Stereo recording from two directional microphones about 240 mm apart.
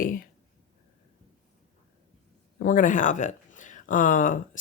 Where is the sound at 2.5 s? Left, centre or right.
Left.